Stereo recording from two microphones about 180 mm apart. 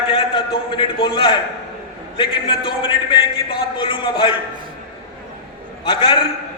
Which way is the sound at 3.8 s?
25° left (ahead or behind).